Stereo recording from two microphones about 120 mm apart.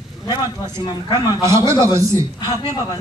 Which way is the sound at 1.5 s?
25° right (ahead or behind).